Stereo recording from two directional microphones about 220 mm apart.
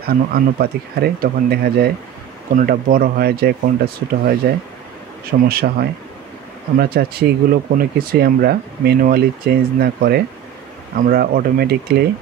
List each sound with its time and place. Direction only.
0.0 s speech: 45° right (ahead or behind)